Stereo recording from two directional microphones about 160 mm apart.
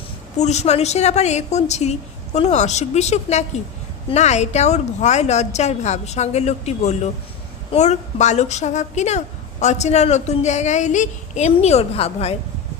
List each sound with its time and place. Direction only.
0.3 s a woman's voice: 45° left (ahead or behind)